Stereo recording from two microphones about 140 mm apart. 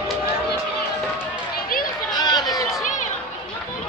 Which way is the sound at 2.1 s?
30° left (ahead or behind).